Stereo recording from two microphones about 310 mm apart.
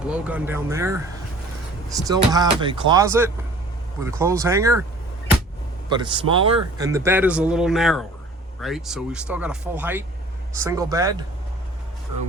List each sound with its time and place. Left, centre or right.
0.0 s speech: centre
5.9 s speech: centre